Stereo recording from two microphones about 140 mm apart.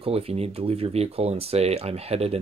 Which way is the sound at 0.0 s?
45° right (ahead or behind).